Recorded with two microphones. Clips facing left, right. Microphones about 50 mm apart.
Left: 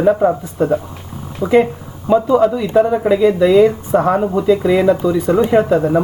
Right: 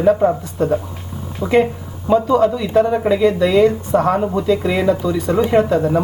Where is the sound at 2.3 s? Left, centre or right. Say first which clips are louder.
Left 2 dB; centre.